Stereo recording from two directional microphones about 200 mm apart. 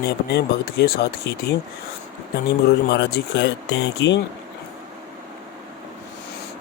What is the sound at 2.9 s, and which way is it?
Speech, 55° left (ahead or behind).